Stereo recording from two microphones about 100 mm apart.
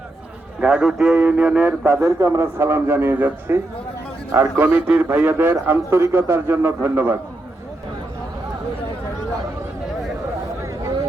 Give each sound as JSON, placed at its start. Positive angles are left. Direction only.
{"t": 0.6, "sound": "speech", "side_deg": -10}
{"t": 1.8, "sound": "a man's voice", "side_deg": -30}
{"t": 4.6, "sound": "a man's voice", "side_deg": -15}
{"t": 10.6, "sound": "a sound", "side_deg": -30}